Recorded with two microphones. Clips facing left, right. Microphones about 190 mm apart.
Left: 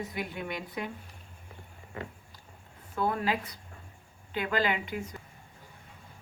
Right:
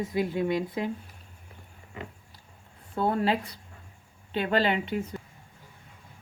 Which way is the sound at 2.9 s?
30° right (ahead or behind).